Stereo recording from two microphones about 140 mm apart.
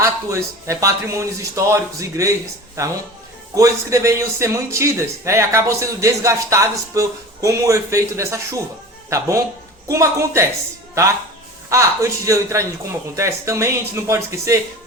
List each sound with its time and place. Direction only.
0.0 s a man's voice: 20° right (ahead or behind)
11.7 s a man's voice: 20° right (ahead or behind)